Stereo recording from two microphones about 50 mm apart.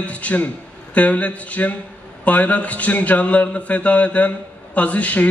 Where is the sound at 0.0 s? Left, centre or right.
Left.